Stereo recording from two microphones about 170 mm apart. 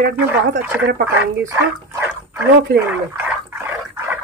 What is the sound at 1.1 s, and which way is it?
Speech, 15° right (ahead or behind).